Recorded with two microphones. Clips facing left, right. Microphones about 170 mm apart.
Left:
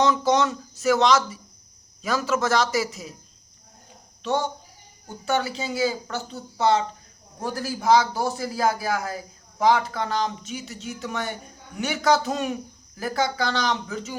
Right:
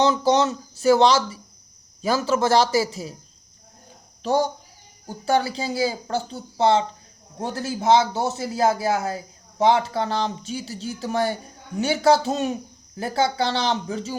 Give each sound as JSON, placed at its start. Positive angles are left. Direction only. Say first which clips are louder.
{"t": 0.0, "sound": "a man's voice", "louder": "right 2 dB", "side_deg": -30}
{"t": 4.2, "sound": "a man's voice", "louder": "right 4 dB", "side_deg": -35}